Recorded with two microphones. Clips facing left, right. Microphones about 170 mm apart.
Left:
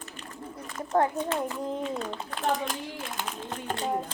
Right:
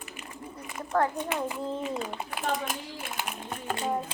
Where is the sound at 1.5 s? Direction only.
10° right (ahead or behind).